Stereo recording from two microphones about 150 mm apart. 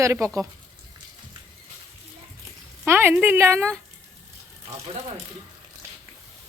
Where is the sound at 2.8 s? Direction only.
15° right (ahead or behind).